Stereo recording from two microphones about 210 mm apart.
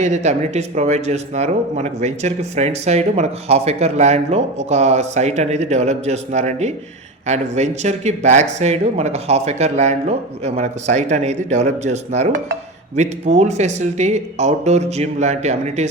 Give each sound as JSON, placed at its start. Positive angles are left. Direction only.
{"t": 0.0, "sound": "speech", "side_deg": -35}